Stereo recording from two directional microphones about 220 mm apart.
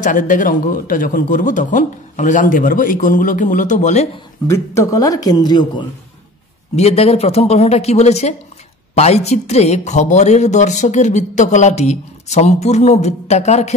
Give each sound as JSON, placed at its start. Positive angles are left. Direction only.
{"t": 0.0, "sound": "speech", "side_deg": 35}
{"t": 4.5, "sound": "speech", "side_deg": 15}